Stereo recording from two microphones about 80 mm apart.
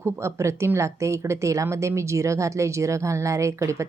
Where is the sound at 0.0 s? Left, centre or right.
Right.